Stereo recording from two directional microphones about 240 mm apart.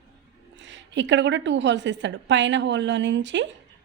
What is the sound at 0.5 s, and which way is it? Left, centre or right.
A woman's voice, right.